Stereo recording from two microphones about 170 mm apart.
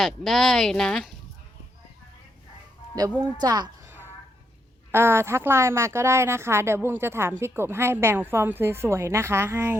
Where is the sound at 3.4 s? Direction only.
25° right (ahead or behind).